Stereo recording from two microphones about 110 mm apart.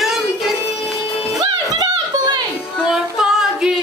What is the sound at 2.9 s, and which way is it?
Female singing, 5° right (ahead or behind).